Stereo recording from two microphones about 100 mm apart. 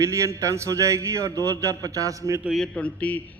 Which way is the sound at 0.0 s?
30° right (ahead or behind).